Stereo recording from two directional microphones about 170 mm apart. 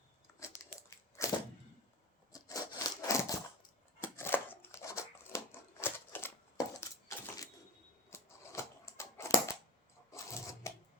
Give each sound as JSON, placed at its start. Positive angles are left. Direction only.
{"t": 0.3, "sound": "biting", "side_deg": 15}
{"t": 0.8, "sound": "crushing", "side_deg": 15}
{"t": 2.3, "sound": "a sound", "side_deg": 20}
{"t": 10.1, "sound": "sewing machine", "side_deg": 20}